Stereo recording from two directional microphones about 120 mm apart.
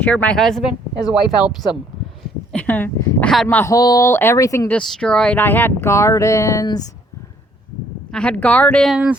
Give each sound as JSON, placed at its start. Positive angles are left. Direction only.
{"t": 0.0, "sound": "a woman's voice", "side_deg": 10}
{"t": 2.5, "sound": "speech", "side_deg": 10}
{"t": 3.7, "sound": "speech", "side_deg": 30}
{"t": 4.1, "sound": "speech", "side_deg": 20}
{"t": 4.7, "sound": "speech", "side_deg": 5}
{"t": 8.1, "sound": "speech", "side_deg": 10}
{"t": 8.9, "sound": "a sound", "side_deg": -10}